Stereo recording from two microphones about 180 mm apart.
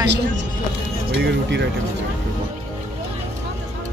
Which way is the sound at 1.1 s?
70° right (ahead or behind).